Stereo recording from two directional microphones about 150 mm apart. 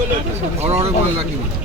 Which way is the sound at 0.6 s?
40° right (ahead or behind).